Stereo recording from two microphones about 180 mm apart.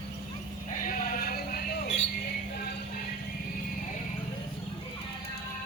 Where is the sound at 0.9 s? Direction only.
50° left (ahead or behind).